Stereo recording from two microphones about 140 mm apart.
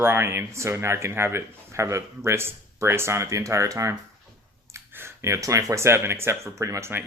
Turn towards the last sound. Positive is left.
turn(degrees=-15)  # may be behind; listen again after turning